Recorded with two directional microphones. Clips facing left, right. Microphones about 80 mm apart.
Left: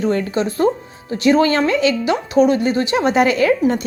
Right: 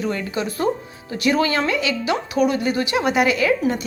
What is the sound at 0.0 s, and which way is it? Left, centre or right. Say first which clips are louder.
A woman's voice: left 6 dB; left.